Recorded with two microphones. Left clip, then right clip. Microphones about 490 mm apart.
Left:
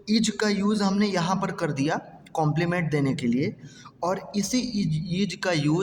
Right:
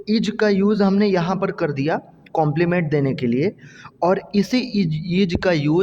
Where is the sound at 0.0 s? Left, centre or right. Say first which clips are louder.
Right 6 dB; right.